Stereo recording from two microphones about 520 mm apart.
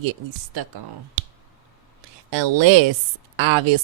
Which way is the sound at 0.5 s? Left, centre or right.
Right.